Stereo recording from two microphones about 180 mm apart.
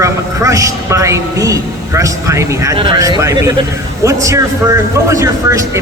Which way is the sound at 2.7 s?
25° right (ahead or behind).